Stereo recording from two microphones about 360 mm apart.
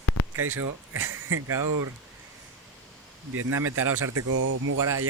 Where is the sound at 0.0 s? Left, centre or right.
Left.